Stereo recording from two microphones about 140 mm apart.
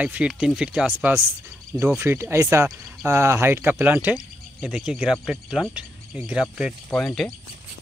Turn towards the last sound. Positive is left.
turn(degrees=5)  # may be behind; listen again after turning